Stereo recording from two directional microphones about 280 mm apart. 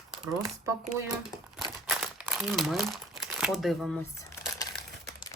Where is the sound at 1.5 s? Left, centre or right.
Centre.